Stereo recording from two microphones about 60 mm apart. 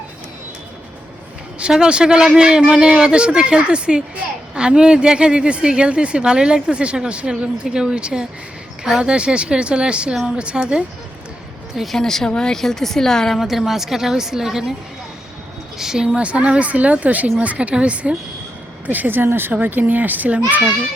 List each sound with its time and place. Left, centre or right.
1.5 s a man's voice: centre
11.7 s a woman's voice: centre
11.9 s speech: centre
15.8 s a man's voice: centre
16.1 s speech: centre